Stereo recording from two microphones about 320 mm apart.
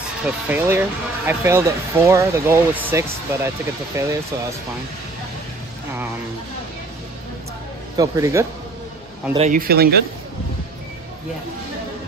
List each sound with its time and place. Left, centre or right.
0.5 s speech: centre
8.0 s speech: centre
9.3 s a man's voice: right